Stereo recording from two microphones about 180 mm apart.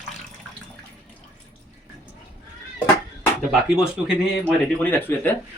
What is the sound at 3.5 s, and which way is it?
Speech, 5° right (ahead or behind).